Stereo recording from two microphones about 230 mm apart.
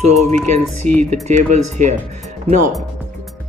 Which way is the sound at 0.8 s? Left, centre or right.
Right.